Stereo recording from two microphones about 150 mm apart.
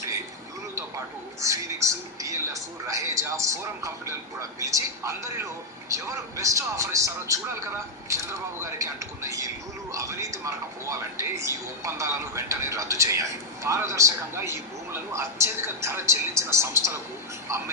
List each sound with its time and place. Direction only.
1.4 s speech: 20° right (ahead or behind)